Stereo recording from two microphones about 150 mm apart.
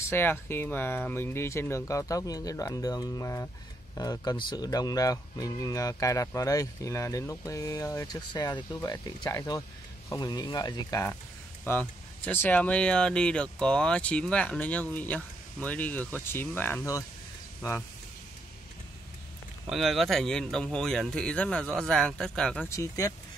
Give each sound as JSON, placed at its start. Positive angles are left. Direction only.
{"t": 0.1, "sound": "speech", "side_deg": 15}
{"t": 19.7, "sound": "speech", "side_deg": 0}
{"t": 22.7, "sound": "speech", "side_deg": 20}